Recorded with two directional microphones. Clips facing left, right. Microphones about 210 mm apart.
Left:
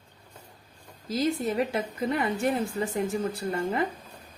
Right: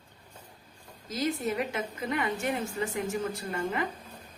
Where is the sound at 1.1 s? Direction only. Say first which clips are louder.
Left 3 dB; 35° left (ahead or behind).